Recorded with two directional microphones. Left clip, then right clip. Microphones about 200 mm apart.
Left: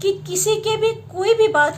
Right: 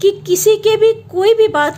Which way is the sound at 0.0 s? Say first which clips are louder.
Right 8 dB; 40° right (ahead or behind).